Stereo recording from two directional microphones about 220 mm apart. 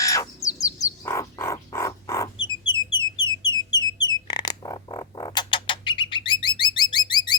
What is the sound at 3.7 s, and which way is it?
Music, 20° left (ahead or behind).